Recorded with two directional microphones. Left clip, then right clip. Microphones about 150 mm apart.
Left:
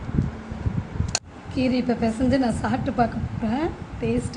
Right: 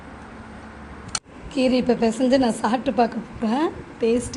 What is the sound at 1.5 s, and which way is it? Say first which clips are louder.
A woman's voice: right 4 dB; 20° right (ahead or behind).